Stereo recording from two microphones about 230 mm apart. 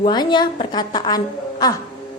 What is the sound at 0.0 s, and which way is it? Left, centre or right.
A woman's voice, centre.